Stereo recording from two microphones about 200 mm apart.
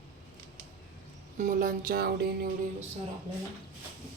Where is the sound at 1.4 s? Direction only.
40° right (ahead or behind).